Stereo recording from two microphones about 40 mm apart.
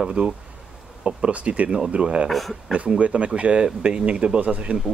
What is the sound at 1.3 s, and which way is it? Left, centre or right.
Speech, right.